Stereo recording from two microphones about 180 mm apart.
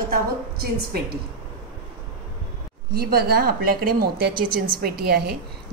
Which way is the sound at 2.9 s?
60° right (ahead or behind).